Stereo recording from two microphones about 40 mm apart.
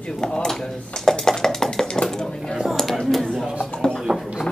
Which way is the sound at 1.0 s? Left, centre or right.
Centre.